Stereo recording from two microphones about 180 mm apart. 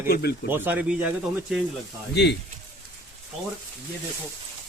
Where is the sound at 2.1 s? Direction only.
70° left (ahead or behind).